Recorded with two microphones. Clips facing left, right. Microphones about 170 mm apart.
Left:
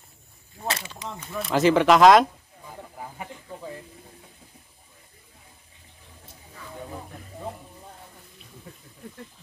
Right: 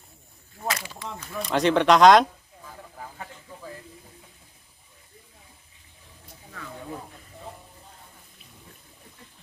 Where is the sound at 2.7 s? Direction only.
15° left (ahead or behind).